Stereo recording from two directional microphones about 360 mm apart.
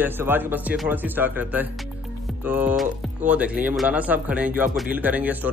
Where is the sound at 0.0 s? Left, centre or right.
Centre.